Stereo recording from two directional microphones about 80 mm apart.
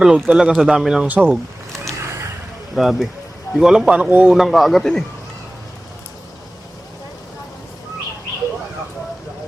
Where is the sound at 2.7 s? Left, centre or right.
Centre.